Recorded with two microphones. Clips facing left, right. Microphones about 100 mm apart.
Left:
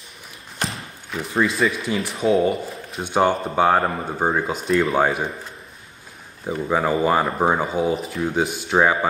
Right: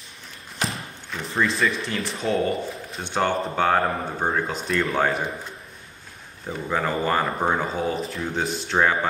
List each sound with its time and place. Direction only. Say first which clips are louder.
0.6 s a sound: even; centre (ahead or behind)
1.4 s speech: left 2 dB; centre (ahead or behind)
6.7 s speech: left 4 dB; 10° left (ahead or behind)